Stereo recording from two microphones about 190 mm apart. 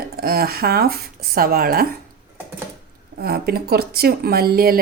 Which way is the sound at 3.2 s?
55° right (ahead or behind).